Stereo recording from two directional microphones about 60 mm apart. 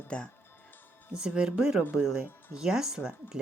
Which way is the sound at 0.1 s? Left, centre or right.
Centre.